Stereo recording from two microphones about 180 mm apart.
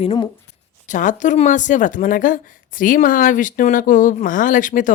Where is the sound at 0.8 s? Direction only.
45° left (ahead or behind).